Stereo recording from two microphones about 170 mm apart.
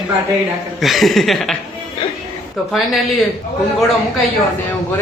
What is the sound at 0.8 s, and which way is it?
Speech, centre (ahead or behind).